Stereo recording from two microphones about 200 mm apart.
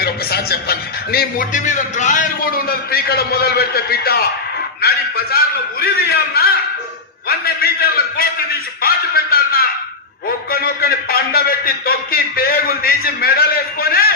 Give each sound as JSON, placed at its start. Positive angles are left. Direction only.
{"t": 0.0, "sound": "a man's voice", "side_deg": 50}